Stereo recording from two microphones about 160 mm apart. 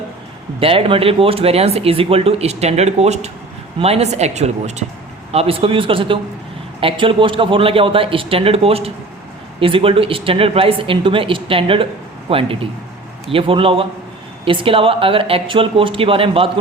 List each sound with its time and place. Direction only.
0.6 s speech: 35° right (ahead or behind)